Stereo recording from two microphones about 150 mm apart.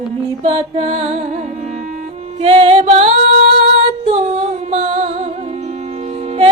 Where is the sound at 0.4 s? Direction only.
40° right (ahead or behind).